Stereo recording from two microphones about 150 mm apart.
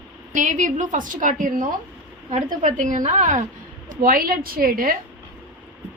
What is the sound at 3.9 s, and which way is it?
A woman's voice, 70° right (ahead or behind).